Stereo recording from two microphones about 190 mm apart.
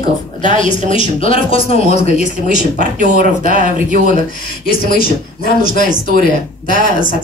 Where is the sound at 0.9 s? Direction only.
30° left (ahead or behind).